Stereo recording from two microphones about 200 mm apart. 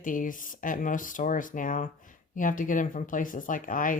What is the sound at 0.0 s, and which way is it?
Speech, 40° left (ahead or behind).